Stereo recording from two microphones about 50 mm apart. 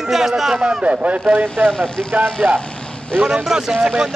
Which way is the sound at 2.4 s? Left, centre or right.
Centre.